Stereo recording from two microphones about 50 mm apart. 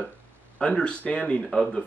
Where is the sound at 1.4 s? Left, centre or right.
Centre.